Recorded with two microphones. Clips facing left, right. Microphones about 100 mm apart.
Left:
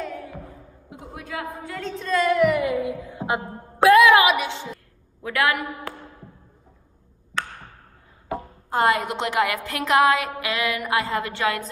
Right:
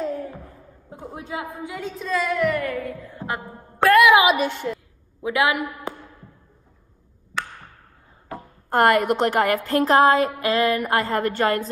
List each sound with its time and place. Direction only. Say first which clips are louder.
0.0 s a sound: right 5 dB; 35° right (ahead or behind)
0.8 s a man's voice: right 3 dB; 30° right (ahead or behind); by 2.0 s 10° right (ahead or behind)
2.0 s speech: left 3 dB; centre (ahead or behind)
2.7 s music: left 4 dB; 15° left (ahead or behind)
3.8 s a sound: left 1 dB; centre (ahead or behind)
4.3 s a woman's voice: right 3 dB; 45° right (ahead or behind)
5.2 s a woman's voice: right 2 dB; 20° right (ahead or behind)
8.6 s a woman's voice: right 4 dB; 55° right (ahead or behind); by 11.7 s 40° right (ahead or behind)